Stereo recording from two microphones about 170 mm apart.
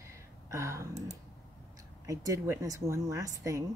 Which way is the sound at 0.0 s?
15° right (ahead or behind).